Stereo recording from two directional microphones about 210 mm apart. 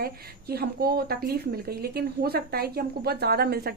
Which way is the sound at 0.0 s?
50° right (ahead or behind).